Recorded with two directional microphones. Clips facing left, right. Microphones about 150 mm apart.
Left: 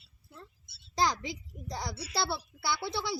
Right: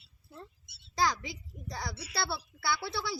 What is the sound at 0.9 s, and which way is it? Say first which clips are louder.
A child's voice: left 1 dB; 20° left (ahead or behind).